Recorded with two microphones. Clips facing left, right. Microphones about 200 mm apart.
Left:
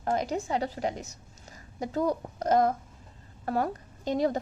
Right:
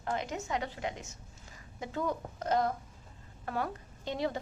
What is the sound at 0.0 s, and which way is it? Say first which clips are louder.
A woman's voice: left 7 dB; 40° left (ahead or behind).